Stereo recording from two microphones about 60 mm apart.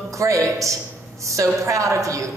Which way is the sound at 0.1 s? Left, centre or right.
Right.